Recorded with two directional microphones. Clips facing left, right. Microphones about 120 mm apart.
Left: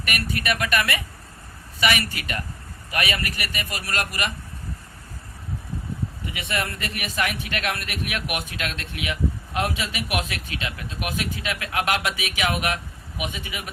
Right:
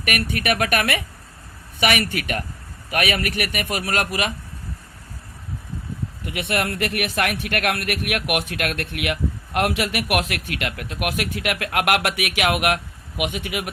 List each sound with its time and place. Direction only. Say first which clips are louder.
0.1 s a man's voice: right 4 dB; 60° right (ahead or behind)
6.2 s a man's voice: right 6 dB; 60° right (ahead or behind)